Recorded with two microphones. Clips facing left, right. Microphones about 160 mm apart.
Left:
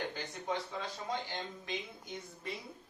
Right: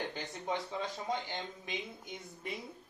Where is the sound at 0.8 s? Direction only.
20° right (ahead or behind).